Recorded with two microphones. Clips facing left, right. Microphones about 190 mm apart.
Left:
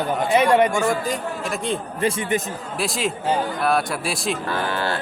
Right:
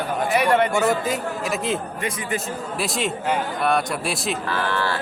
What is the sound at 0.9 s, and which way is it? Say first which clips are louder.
Speech: right 1 dB; 5° right (ahead or behind).